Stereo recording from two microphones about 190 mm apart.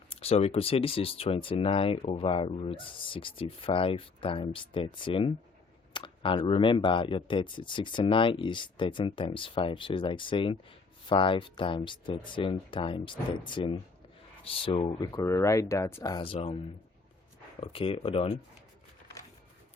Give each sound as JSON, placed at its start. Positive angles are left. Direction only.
{"t": 0.1, "sound": "speech", "side_deg": 30}
{"t": 5.9, "sound": "clicking", "side_deg": 25}
{"t": 6.6, "sound": "speech", "side_deg": 25}
{"t": 17.6, "sound": "speech", "side_deg": 30}